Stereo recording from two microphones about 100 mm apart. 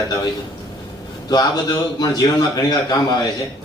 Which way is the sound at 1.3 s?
40° left (ahead or behind).